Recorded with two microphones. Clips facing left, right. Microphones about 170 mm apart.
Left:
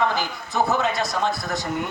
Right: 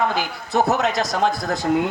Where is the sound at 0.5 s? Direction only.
75° right (ahead or behind).